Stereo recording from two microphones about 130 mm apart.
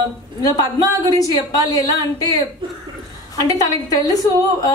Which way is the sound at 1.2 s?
30° left (ahead or behind).